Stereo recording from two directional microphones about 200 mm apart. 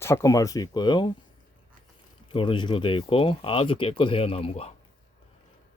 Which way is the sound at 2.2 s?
25° left (ahead or behind).